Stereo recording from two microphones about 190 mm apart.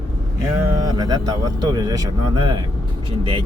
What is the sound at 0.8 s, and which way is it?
Speech, 20° right (ahead or behind).